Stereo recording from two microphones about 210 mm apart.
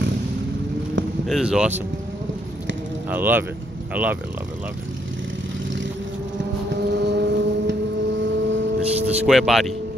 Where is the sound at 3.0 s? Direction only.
10° right (ahead or behind).